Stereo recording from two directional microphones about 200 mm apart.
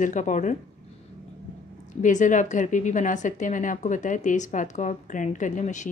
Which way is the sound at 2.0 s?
40° left (ahead or behind).